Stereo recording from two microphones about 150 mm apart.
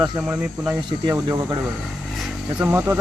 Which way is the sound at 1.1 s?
25° right (ahead or behind).